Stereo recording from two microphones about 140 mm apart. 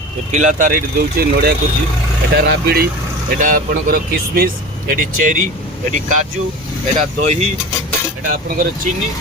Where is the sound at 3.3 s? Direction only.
75° right (ahead or behind); by 4.9 s 90° right.